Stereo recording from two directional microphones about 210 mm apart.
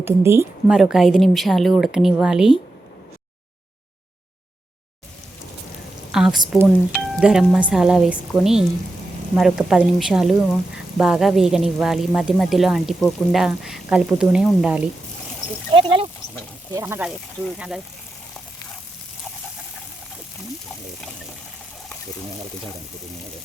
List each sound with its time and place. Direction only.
0.0 s a woman's voice: 10° right (ahead or behind)
0.8 s a woman's voice: centre (ahead or behind)
6.1 s a woman's voice: centre (ahead or behind)
15.7 s speech: 25° right (ahead or behind)
16.7 s a woman's voice: 10° right (ahead or behind)